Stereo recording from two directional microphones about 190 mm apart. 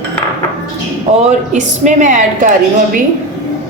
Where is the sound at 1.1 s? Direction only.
35° right (ahead or behind).